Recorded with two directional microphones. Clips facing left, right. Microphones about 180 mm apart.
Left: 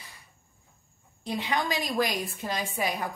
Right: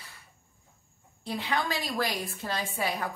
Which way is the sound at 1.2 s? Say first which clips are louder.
Left 1 dB; 15° left (ahead or behind).